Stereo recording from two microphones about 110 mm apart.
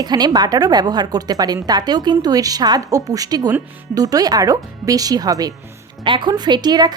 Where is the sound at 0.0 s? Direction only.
40° right (ahead or behind).